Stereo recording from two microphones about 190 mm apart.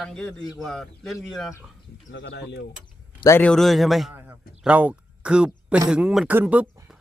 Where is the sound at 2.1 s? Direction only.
70° left (ahead or behind).